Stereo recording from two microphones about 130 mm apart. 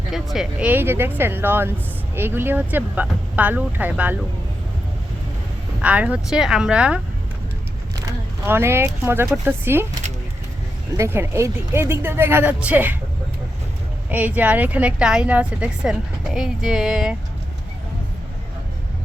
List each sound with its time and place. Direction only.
0.1 s a woman's voice: centre (ahead or behind)
5.8 s a woman's voice: 10° right (ahead or behind)
7.9 s a sound: 20° right (ahead or behind)
9.0 s a woman's voice: 20° right (ahead or behind)
10.9 s a woman's voice: 20° right (ahead or behind)
14.1 s a woman's voice: 10° right (ahead or behind)